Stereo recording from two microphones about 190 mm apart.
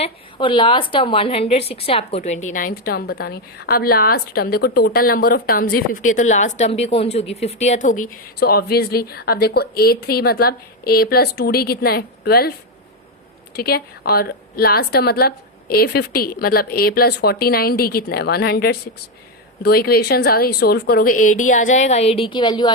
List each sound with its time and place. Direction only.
0.0 s a woman's voice: 25° left (ahead or behind); by 12.5 s 55° left (ahead or behind)
13.6 s a woman's voice: 55° left (ahead or behind); by 22.7 s 25° left (ahead or behind)